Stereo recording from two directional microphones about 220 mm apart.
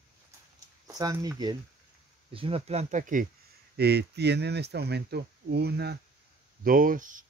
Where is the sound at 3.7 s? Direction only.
50° right (ahead or behind).